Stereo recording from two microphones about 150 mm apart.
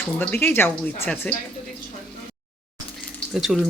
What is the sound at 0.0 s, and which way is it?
A woman's voice, 10° left (ahead or behind).